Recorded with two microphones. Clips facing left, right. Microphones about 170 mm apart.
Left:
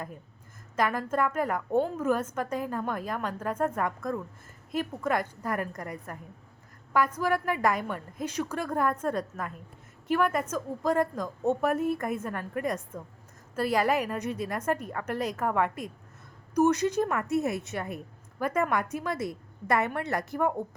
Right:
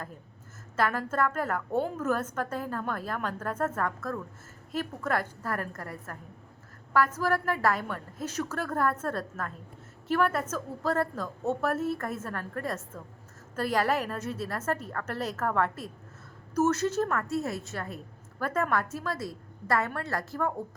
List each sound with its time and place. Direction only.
0.8 s a woman's voice: 10° left (ahead or behind)
7.2 s a woman's voice: 15° left (ahead or behind)